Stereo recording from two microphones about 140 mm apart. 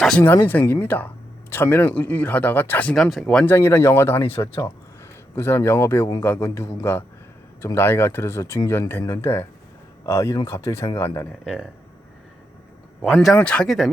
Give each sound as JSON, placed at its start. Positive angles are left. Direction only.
{"t": 0.0, "sound": "speech", "side_deg": 5}
{"t": 3.4, "sound": "speech", "side_deg": 15}
{"t": 5.3, "sound": "speech", "side_deg": 20}
{"t": 11.3, "sound": "speech", "side_deg": -5}
{"t": 13.1, "sound": "speech", "side_deg": 5}